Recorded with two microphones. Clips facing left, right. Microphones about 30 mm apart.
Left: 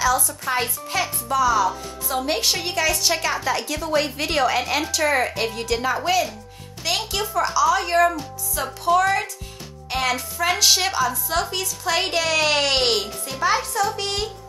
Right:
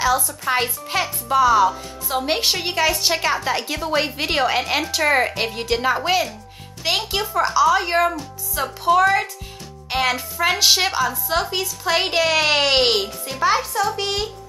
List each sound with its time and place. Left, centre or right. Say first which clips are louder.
0.5 s a woman's voice: right 3 dB; right